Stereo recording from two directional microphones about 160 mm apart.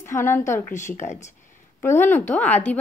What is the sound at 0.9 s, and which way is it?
Speech, 45° left (ahead or behind).